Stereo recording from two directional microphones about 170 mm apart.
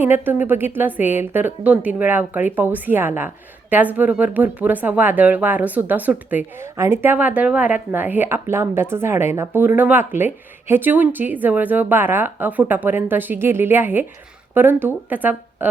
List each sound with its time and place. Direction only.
0.0 s speech: 10° right (ahead or behind)